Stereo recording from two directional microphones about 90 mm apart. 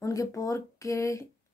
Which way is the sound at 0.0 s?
35° left (ahead or behind).